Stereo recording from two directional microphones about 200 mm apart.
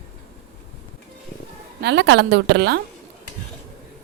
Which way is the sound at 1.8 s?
60° right (ahead or behind).